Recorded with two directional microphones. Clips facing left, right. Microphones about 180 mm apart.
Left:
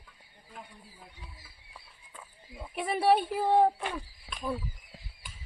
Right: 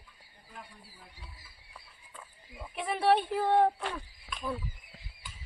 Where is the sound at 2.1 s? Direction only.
5° left (ahead or behind).